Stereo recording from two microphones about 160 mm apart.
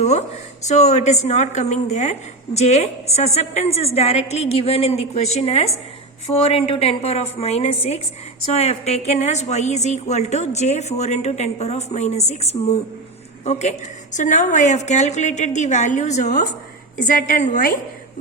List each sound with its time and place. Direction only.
0.0 s a woman's voice: 45° left (ahead or behind)